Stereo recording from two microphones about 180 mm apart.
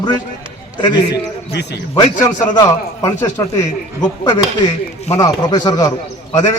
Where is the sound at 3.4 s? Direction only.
20° left (ahead or behind).